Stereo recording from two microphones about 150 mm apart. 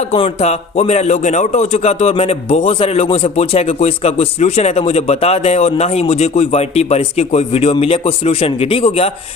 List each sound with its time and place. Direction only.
0.1 s a man's voice: 45° left (ahead or behind)